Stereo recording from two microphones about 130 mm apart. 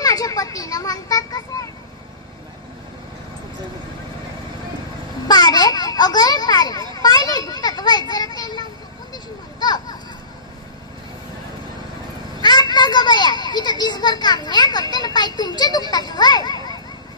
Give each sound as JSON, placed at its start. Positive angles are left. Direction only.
{"t": 0.0, "sound": "a sound", "side_deg": 30}
{"t": 5.3, "sound": "children playing", "side_deg": 30}
{"t": 12.4, "sound": "children playing", "side_deg": 35}